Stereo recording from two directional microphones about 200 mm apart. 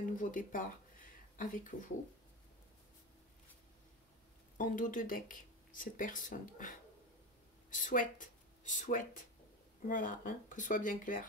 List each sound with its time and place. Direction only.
0.1 s speech: 40° left (ahead or behind)
4.6 s speech: 40° left (ahead or behind)
7.7 s speech: 40° left (ahead or behind)